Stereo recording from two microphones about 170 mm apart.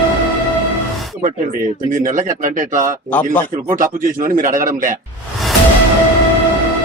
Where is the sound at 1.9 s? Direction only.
50° right (ahead or behind).